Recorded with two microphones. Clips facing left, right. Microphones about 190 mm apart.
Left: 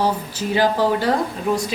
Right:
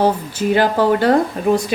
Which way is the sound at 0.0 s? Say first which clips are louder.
Right 5 dB; 55° right (ahead or behind).